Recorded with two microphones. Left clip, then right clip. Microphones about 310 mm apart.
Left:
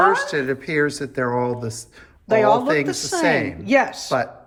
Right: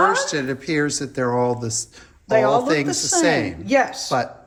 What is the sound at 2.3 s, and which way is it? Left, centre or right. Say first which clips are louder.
Speech: left 1 dB; left.